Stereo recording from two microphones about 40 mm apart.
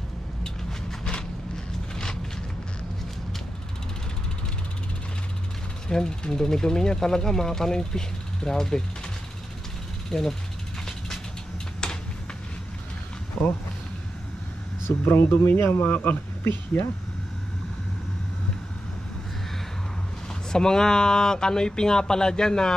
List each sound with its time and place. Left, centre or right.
0.4 s a sound: centre
5.9 s speech: centre
10.0 s speech: centre
11.8 s a sound: centre
13.4 s speech: centre
14.9 s speech: left
15.8 s speech: left
20.5 s speech: centre